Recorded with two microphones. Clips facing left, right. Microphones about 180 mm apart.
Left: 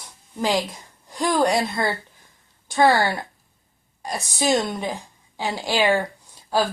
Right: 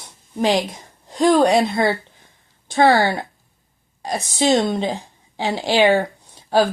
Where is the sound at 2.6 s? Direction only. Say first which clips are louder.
Right 2 dB; 25° right (ahead or behind).